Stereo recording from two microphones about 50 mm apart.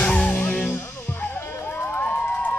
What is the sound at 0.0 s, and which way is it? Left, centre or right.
Music, left.